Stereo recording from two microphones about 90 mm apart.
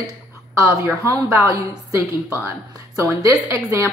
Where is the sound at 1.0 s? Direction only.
30° right (ahead or behind).